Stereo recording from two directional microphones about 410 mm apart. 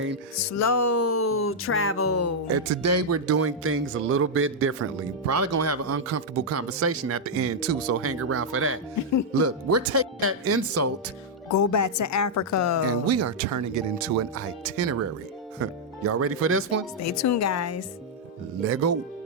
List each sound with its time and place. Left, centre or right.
0.3 s music: left
2.5 s speech: right
11.5 s music: left
13.1 s speech: right
17.0 s music: left
18.6 s speech: right